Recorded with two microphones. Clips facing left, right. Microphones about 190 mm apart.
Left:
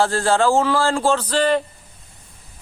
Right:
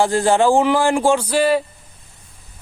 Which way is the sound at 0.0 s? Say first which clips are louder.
Right 2 dB; 15° right (ahead or behind).